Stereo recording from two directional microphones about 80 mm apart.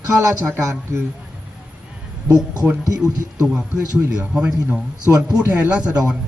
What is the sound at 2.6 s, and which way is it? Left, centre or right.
Speech, right.